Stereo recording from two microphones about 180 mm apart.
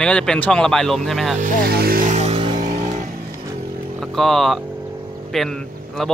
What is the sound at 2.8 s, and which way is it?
Vehicle, 45° right (ahead or behind).